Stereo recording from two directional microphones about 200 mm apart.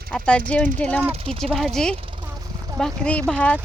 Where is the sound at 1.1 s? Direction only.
25° right (ahead or behind).